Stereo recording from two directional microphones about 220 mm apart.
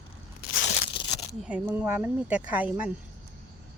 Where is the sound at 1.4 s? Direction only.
5° right (ahead or behind).